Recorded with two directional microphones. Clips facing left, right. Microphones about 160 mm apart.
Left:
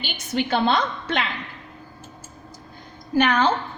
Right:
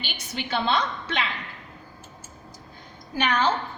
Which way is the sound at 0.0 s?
50° left (ahead or behind).